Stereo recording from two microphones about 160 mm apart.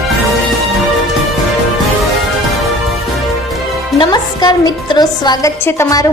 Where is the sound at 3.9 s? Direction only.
25° left (ahead or behind).